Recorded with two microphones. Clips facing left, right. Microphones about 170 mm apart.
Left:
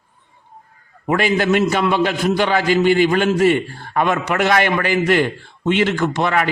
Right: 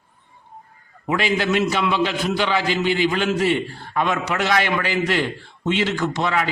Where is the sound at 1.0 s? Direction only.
50° left (ahead or behind).